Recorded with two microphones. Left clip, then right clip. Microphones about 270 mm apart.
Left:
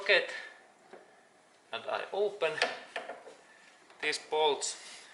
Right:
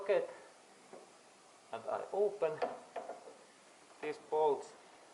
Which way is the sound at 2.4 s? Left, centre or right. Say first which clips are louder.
Left 6 dB; centre.